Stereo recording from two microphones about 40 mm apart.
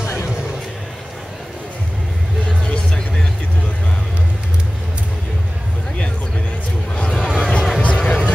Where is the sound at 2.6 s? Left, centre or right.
Left.